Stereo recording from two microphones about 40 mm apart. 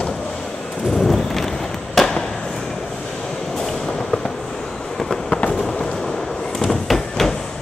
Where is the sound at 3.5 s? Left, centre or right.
Centre.